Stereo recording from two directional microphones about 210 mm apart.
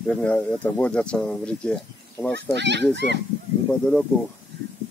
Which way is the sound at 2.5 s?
55° right (ahead or behind).